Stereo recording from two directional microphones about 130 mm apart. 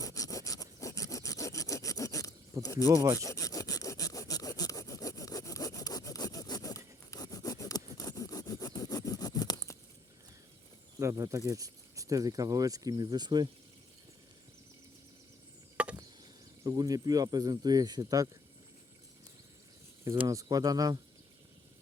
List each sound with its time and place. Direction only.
0.0 s sawing: 25° left (ahead or behind)
2.6 s speech: 25° left (ahead or behind)
3.2 s toothbrush: 25° left (ahead or behind)
11.0 s speech: 25° right (ahead or behind)
15.8 s chop: 10° right (ahead or behind)
16.6 s speech: 30° right (ahead or behind)
20.2 s speech: 25° right (ahead or behind)